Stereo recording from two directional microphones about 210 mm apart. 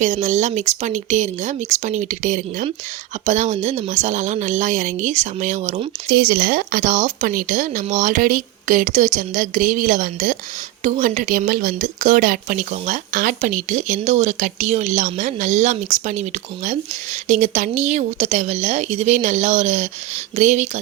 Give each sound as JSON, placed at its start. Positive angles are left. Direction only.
{"t": 0.0, "sound": "speech", "side_deg": -35}
{"t": 6.1, "sound": "speech", "side_deg": -50}